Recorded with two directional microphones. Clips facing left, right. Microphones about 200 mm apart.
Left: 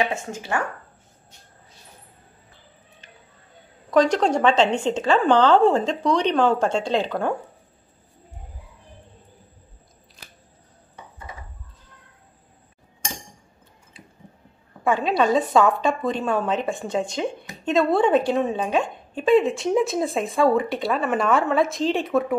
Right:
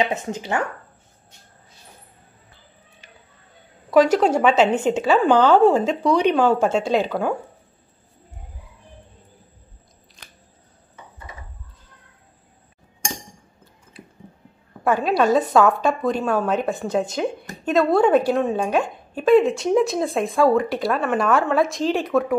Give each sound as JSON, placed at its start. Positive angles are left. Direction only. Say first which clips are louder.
{"t": 0.0, "sound": "speech", "louder": "right 2 dB", "side_deg": -20}
{"t": 3.9, "sound": "a woman's voice", "louder": "right 3 dB", "side_deg": -5}
{"t": 14.9, "sound": "a woman's voice", "louder": "right 2 dB", "side_deg": -5}